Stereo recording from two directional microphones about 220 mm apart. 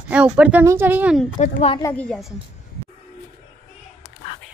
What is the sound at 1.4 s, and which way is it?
Speech, 30° left (ahead or behind).